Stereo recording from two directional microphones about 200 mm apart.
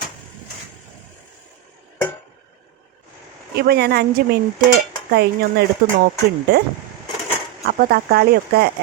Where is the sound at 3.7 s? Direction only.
55° right (ahead or behind).